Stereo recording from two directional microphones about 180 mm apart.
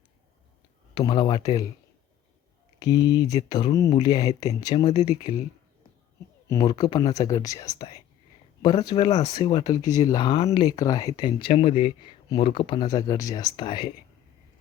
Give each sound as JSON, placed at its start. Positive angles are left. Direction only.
{"t": 0.9, "sound": "speech", "side_deg": 25}
{"t": 2.7, "sound": "speech", "side_deg": 20}
{"t": 4.9, "sound": "speech", "side_deg": 35}
{"t": 6.5, "sound": "speech", "side_deg": 25}